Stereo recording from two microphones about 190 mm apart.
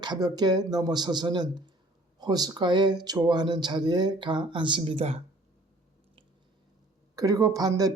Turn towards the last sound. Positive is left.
turn(degrees=-20)  # may be behind; listen again after turning